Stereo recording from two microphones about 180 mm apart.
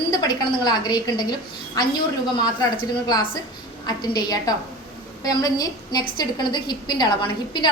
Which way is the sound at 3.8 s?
20° left (ahead or behind).